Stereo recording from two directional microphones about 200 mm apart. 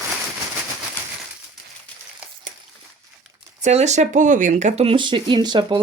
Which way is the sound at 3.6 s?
35° right (ahead or behind).